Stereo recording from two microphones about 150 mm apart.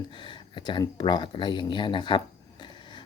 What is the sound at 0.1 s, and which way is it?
Speech, 30° left (ahead or behind).